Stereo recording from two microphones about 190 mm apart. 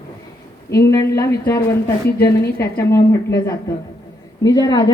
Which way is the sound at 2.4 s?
55° left (ahead or behind).